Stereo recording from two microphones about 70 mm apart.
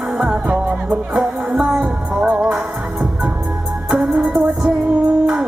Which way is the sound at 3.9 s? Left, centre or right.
Centre.